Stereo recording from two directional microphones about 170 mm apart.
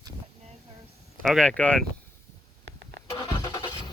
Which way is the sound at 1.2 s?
5° left (ahead or behind).